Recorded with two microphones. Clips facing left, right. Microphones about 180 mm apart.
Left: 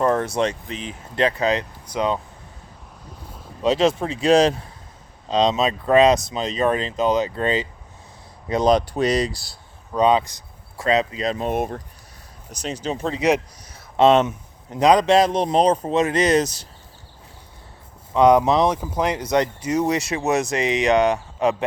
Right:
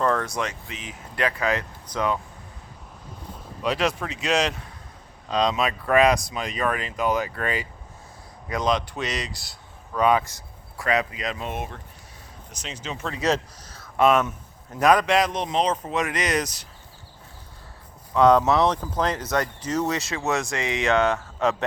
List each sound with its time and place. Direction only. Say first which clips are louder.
0.0 s a sound: left 4 dB; 20° left (ahead or behind)
0.3 s speech: left 7 dB; 30° left (ahead or behind)
3.6 s speech: left 6 dB; 25° left (ahead or behind)
9.9 s speech: left 3 dB; 20° left (ahead or behind)
13.1 s speech: left 3 dB; 15° left (ahead or behind)
18.1 s speech: left 2 dB; 15° left (ahead or behind)